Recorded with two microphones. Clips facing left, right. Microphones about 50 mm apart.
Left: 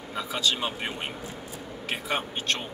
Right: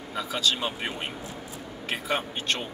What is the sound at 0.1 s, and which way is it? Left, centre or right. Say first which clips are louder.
Speech: right 1 dB; centre.